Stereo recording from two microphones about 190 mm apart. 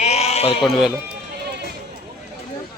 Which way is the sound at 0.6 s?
Centre (ahead or behind).